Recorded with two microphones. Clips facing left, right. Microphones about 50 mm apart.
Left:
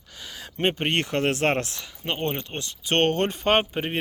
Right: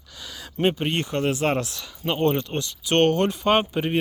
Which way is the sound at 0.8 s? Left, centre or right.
Left.